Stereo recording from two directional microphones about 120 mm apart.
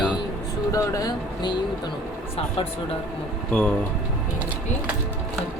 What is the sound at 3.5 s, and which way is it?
Speech, 5° left (ahead or behind).